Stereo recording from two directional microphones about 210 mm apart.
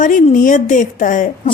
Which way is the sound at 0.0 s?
40° left (ahead or behind).